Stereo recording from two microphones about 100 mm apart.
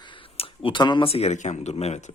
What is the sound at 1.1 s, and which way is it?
Speech, 90° left.